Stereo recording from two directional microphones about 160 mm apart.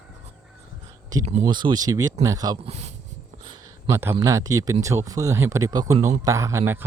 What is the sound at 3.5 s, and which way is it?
A man's voice, 20° right (ahead or behind).